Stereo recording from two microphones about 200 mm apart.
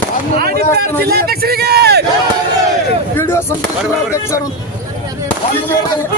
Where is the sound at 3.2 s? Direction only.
10° left (ahead or behind).